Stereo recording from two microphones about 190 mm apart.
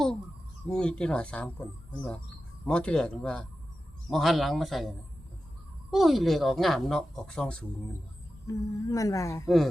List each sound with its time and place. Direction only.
0.7 s speech: 5° left (ahead or behind)
5.9 s speech: centre (ahead or behind)
8.4 s speech: 15° left (ahead or behind)